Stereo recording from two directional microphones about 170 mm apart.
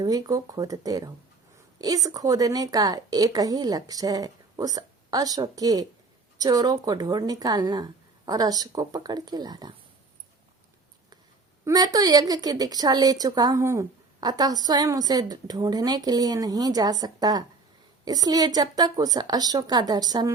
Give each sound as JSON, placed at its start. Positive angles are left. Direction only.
{"t": 0.0, "sound": "a woman's voice", "side_deg": -20}
{"t": 11.6, "sound": "a woman's voice", "side_deg": -20}